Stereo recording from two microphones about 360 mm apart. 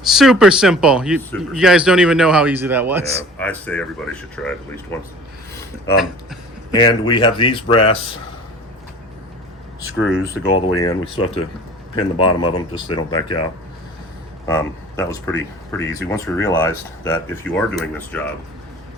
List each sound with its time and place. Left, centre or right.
0.0 s speech: centre
6.7 s speech: centre
10.0 s speech: left
10.8 s speech: centre
14.4 s speech: centre